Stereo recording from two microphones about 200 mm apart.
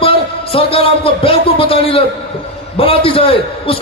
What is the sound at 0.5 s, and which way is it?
A man's voice, 25° left (ahead or behind).